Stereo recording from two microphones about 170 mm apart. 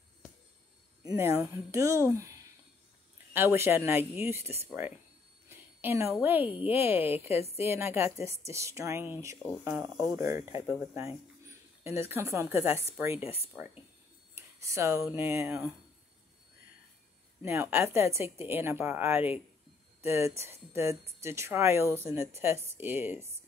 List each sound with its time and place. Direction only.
1.0 s a woman's voice: 15° right (ahead or behind)
3.3 s a woman's voice: 15° right (ahead or behind)
5.5 s jingle bell: 15° right (ahead or behind)
6.2 s a woman's voice: 10° right (ahead or behind)
11.8 s a woman's voice: 15° right (ahead or behind)
14.3 s speech: 15° right (ahead or behind)
17.4 s a woman's voice: 15° right (ahead or behind)